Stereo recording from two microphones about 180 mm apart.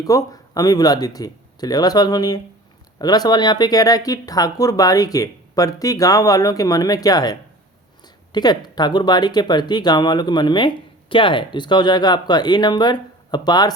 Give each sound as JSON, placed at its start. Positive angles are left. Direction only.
{"t": 0.0, "sound": "speech", "side_deg": 20}